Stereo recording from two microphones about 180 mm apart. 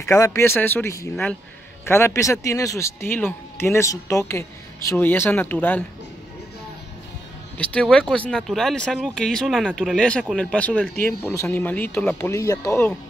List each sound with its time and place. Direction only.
0.0 s speech: 15° left (ahead or behind)
7.5 s speech: 5° left (ahead or behind)